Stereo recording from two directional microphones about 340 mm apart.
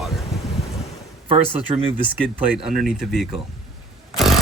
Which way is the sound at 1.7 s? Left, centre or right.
Centre.